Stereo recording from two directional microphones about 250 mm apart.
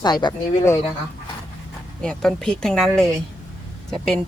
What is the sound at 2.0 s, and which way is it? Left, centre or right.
Speech, centre.